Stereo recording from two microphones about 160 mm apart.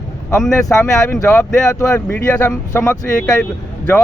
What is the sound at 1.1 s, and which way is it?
Speech, 20° left (ahead or behind).